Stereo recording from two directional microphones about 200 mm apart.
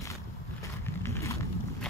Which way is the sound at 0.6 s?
15° left (ahead or behind).